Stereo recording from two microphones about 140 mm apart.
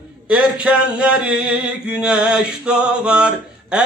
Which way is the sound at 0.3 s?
5° right (ahead or behind).